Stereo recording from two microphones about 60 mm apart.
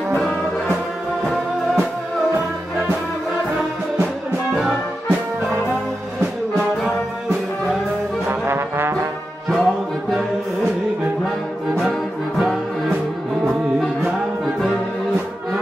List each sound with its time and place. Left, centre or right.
8.3 s trombone: right
9.5 s music: centre
12.4 s music: centre